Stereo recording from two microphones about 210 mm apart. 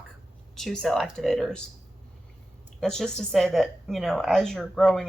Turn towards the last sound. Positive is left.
turn(degrees=0)  # may be behind; listen again after turning